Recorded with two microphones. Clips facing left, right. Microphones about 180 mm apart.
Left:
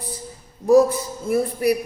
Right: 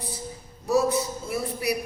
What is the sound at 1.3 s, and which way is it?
Speech, 50° left (ahead or behind).